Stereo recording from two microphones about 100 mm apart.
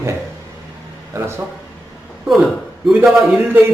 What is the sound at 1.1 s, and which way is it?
Speech, 25° right (ahead or behind).